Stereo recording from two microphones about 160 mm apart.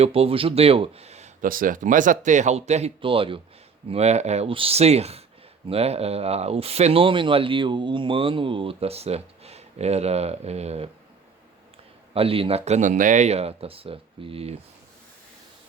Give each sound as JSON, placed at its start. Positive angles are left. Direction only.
{"t": 0.0, "sound": "speech", "side_deg": -40}
{"t": 12.1, "sound": "speech", "side_deg": -35}